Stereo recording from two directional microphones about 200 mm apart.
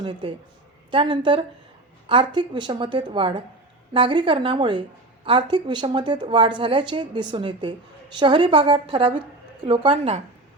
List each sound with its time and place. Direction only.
0.0 s a woman's voice: 25° right (ahead or behind)